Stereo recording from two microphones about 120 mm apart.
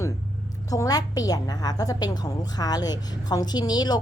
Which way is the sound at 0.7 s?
30° left (ahead or behind).